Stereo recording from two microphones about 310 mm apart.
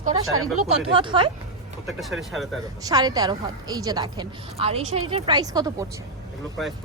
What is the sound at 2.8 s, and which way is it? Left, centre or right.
A woman's voice, centre.